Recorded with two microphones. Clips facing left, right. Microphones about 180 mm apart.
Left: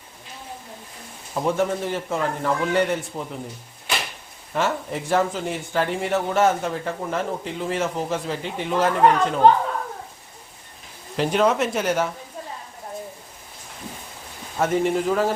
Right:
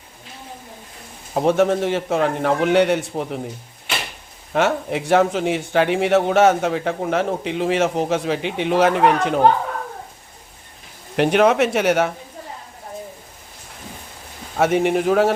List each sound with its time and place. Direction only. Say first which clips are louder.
1.3 s speech: right 6 dB; 65° right (ahead or behind)
4.5 s speech: right 5 dB; 70° right (ahead or behind)
9.0 s speech: right 1 dB; 15° right (ahead or behind)
11.2 s speech: right 5 dB; 70° right (ahead or behind)
14.5 s speech: right 4 dB; 70° right (ahead or behind)